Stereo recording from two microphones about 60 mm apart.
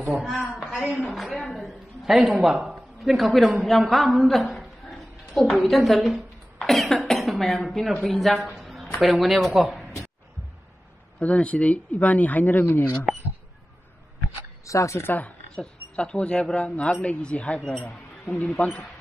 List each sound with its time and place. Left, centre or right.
0.1 s a woman's voice: centre
0.7 s a woman's voice: right
1.1 s a woman's voice: centre
1.5 s a sound: centre
2.4 s a woman's voice: centre
11.1 s speech: left
14.7 s speech: left
15.0 s speech: left
15.5 s speech: centre
18.6 s speech: left